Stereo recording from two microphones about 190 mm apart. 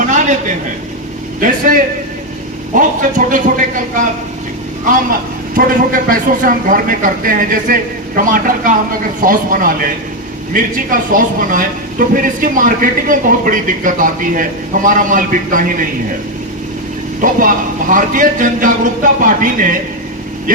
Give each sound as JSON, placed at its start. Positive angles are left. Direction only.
{"t": 0.0, "sound": "a sound", "side_deg": -40}
{"t": 1.4, "sound": "speech", "side_deg": -45}
{"t": 2.7, "sound": "speech", "side_deg": -45}
{"t": 5.5, "sound": "speech", "side_deg": -45}
{"t": 17.2, "sound": "speech", "side_deg": -45}